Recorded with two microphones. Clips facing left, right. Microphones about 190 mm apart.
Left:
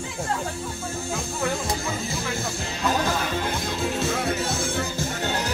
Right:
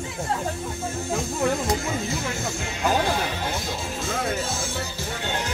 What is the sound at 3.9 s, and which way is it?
Music, 65° left (ahead or behind).